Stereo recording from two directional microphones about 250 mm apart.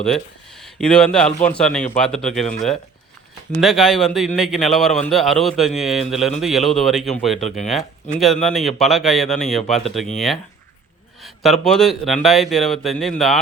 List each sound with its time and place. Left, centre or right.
0.0 s speech: centre